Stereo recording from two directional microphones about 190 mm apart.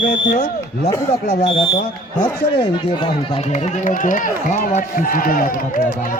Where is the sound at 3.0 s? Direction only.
25° left (ahead or behind).